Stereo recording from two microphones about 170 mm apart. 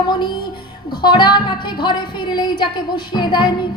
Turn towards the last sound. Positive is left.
turn(degrees=25)  # may be behind; listen again after turning